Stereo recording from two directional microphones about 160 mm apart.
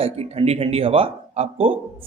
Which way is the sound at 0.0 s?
40° right (ahead or behind).